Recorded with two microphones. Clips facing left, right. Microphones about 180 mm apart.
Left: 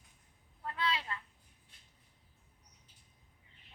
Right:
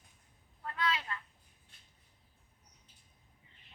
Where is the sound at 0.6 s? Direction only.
30° left (ahead or behind).